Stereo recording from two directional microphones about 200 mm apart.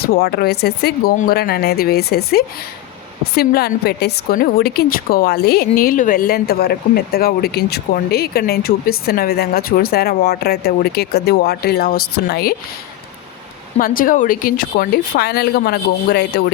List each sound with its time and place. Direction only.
0.0 s a woman's voice: 50° left (ahead or behind)
13.7 s a woman's voice: 45° left (ahead or behind)